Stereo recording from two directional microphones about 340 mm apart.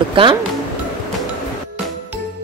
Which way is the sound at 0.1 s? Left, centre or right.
Centre.